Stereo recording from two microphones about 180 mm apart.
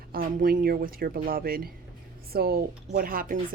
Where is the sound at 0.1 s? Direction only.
55° right (ahead or behind).